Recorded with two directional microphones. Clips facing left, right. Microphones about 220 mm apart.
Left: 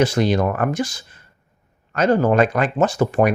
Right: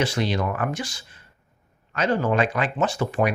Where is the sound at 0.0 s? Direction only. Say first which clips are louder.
Left 7 dB; 45° left (ahead or behind).